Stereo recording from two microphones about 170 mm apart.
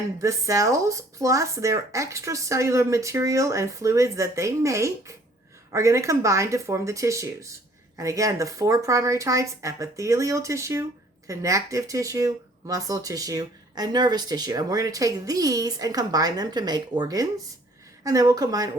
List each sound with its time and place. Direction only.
0.2 s speech: 20° right (ahead or behind)